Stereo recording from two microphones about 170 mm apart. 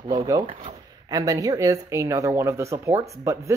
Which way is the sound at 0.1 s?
25° right (ahead or behind).